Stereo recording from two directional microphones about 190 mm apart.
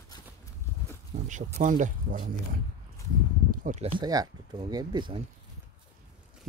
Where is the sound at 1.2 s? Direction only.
40° right (ahead or behind).